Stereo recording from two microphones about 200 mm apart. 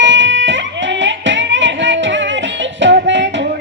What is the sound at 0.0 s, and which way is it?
Music, 65° right (ahead or behind).